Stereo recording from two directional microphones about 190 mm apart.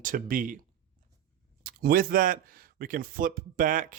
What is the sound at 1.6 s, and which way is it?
Speech, 50° right (ahead or behind).